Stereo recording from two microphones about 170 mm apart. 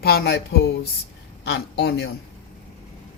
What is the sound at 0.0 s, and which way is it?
Speech, 70° left (ahead or behind).